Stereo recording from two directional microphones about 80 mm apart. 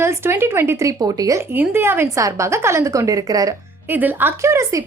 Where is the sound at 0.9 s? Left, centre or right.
Right.